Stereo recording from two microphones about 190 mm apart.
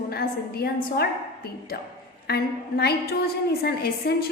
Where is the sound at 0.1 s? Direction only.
55° left (ahead or behind).